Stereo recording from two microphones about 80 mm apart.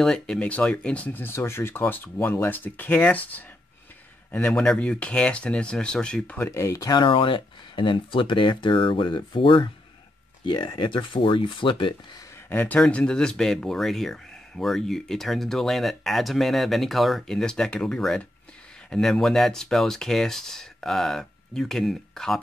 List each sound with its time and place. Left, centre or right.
0.0 s a man's voice: centre
6.3 s speech: left
6.9 s speech: left
12.4 s speech: left; by 22.4 s centre